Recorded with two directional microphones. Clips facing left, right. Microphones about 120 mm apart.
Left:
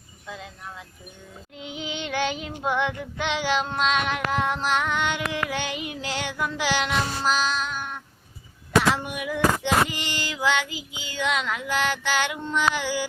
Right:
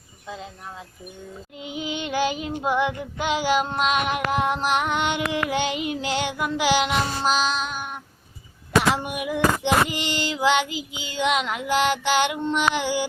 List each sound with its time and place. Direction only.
0.3 s female singing: 25° right (ahead or behind)
1.5 s child singing: 5° right (ahead or behind)
9.0 s female singing: 15° right (ahead or behind)